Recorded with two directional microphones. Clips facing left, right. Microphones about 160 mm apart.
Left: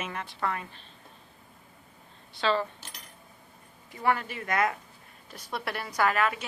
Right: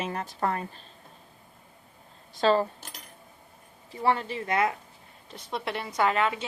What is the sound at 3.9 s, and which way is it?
A woman's voice, 30° right (ahead or behind).